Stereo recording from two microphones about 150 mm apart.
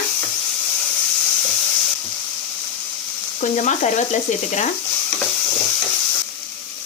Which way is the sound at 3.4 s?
55° left (ahead or behind).